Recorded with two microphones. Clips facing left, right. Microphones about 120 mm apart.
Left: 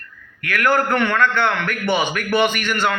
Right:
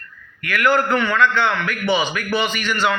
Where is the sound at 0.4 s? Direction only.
55° left (ahead or behind).